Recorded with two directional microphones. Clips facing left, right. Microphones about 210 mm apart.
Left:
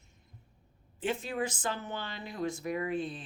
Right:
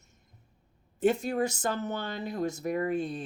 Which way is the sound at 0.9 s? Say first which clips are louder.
Right 7 dB; 40° right (ahead or behind).